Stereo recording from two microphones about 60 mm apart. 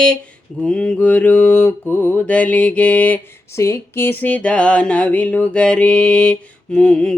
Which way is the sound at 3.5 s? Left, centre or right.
Left.